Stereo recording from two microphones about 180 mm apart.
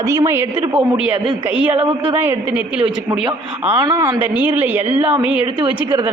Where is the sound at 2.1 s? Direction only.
10° right (ahead or behind).